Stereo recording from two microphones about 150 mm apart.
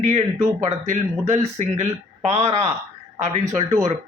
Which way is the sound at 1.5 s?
50° right (ahead or behind).